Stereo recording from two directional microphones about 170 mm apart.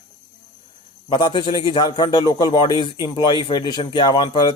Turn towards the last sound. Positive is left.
turn(degrees=25)  # may be behind; listen again after turning